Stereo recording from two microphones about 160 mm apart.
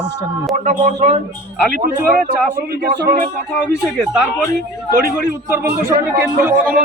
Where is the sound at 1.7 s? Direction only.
60° right (ahead or behind).